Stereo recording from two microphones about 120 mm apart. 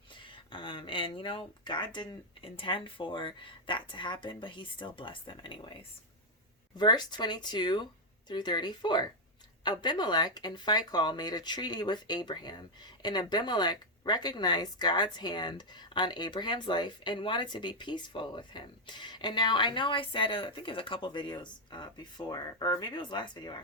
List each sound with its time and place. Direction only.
0.3 s speech: 45° left (ahead or behind)
6.7 s speech: 40° left (ahead or behind)